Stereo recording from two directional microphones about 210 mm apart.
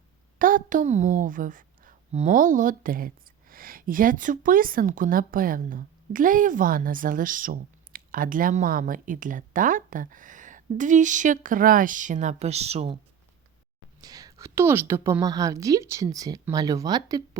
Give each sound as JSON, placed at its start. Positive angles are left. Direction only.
{"t": 0.3, "sound": "a woman's voice", "side_deg": -40}
{"t": 14.0, "sound": "a woman's voice", "side_deg": -15}